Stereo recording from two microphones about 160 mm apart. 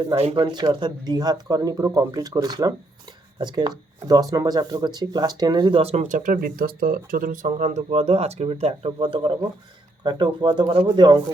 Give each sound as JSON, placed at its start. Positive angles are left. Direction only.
{"t": 0.2, "sound": "speech", "side_deg": -40}
{"t": 0.5, "sound": "speech", "side_deg": -25}
{"t": 6.0, "sound": "speech", "side_deg": -55}